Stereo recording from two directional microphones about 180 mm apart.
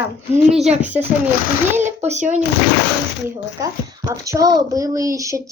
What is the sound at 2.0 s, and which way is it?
Speech, 40° right (ahead or behind).